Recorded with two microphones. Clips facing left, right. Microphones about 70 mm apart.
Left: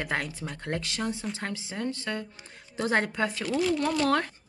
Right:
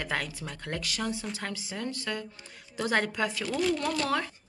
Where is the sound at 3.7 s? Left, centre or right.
Centre.